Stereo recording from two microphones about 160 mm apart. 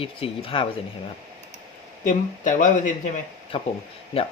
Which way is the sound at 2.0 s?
55° left (ahead or behind).